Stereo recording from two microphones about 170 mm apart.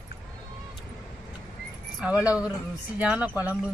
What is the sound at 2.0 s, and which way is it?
Speech, 10° right (ahead or behind).